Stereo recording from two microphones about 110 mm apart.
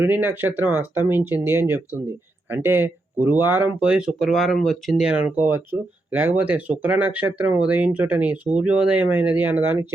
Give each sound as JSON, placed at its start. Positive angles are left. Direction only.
{"t": 0.0, "sound": "speech", "side_deg": -20}